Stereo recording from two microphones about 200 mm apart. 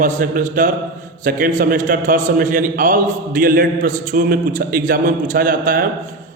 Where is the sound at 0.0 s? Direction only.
40° right (ahead or behind).